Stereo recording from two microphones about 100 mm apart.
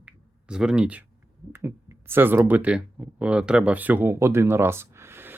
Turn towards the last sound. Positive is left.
turn(degrees=-25)  # may be behind; listen again after turning